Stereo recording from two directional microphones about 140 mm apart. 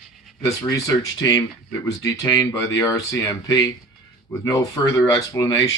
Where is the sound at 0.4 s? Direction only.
25° left (ahead or behind).